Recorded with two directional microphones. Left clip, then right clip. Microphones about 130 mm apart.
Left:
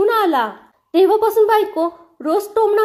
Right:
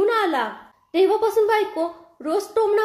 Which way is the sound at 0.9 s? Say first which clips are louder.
Left 5 dB; 40° left (ahead or behind).